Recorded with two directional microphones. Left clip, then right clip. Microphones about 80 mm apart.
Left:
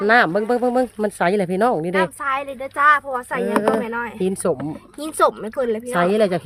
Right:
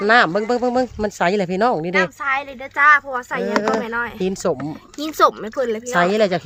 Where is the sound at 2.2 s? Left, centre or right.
Left.